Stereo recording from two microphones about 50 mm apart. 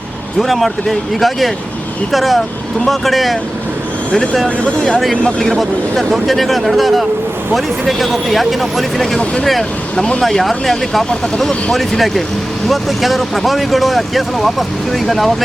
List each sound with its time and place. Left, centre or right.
0.3 s speech: centre
4.1 s speech: centre
4.9 s speech: centre
10.0 s speech: centre
10.2 s speech: centre